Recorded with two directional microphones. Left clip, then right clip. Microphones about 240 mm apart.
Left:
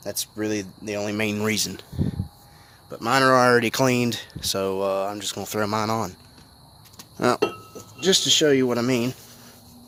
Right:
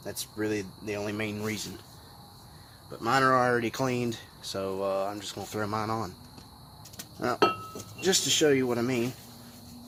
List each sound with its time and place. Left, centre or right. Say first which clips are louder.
0.0 s speech: left 5 dB; left
2.9 s speech: left 6 dB; left
7.2 s speech: left 4 dB; left
8.0 s speech: left 6 dB; left